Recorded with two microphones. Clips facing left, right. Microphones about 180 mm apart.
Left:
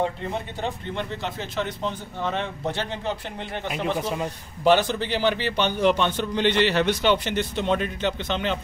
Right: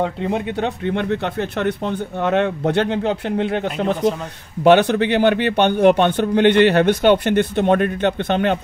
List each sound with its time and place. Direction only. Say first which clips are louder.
0.0 s speech: right 6 dB; 70° right (ahead or behind)